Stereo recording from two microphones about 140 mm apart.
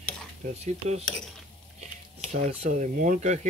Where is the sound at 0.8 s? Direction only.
55° right (ahead or behind).